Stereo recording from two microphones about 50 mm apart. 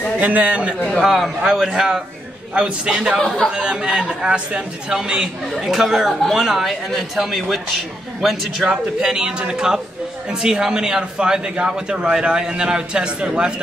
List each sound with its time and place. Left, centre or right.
0.2 s a man's voice: right
1.0 s a man's voice: centre
3.2 s a man's voice: centre
3.4 s a man's voice: centre
5.6 s a man's voice: centre